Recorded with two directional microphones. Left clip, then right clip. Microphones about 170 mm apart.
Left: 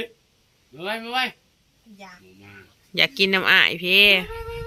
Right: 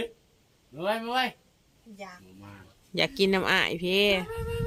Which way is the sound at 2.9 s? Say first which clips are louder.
Left 6 dB; 10° right (ahead or behind).